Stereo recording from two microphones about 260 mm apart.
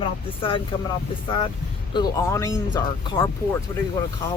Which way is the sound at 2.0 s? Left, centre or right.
Centre.